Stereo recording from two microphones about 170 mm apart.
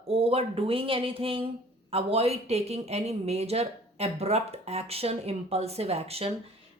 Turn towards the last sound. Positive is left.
turn(degrees=-35)  # may be behind; listen again after turning